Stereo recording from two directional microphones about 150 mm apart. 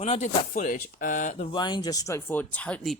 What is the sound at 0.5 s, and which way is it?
Speech, 65° left (ahead or behind).